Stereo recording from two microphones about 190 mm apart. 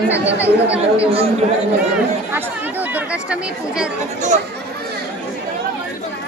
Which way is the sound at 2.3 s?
10° right (ahead or behind).